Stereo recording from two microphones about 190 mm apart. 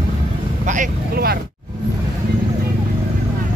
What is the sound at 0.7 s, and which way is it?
Speech, 50° right (ahead or behind).